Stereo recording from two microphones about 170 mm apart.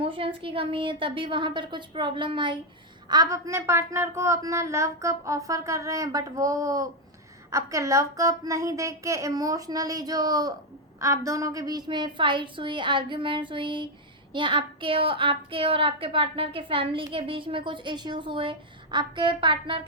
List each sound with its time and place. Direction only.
0.0 s a woman's voice: 30° right (ahead or behind)